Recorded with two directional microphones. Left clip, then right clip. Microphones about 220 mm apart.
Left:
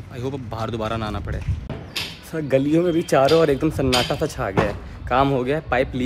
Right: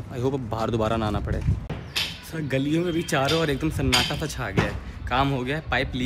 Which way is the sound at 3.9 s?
45° left (ahead or behind).